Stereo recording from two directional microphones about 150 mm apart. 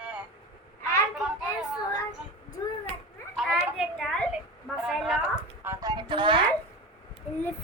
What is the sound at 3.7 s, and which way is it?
A woman's voice, 5° left (ahead or behind).